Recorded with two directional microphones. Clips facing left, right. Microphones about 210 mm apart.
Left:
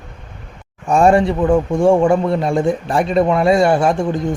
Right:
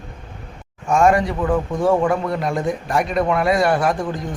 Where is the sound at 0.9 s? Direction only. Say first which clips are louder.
Left 4 dB; 35° left (ahead or behind).